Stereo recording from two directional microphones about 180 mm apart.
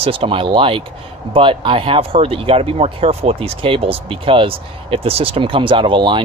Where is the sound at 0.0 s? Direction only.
30° right (ahead or behind).